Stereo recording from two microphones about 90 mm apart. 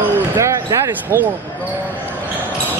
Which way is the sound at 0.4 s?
40° right (ahead or behind).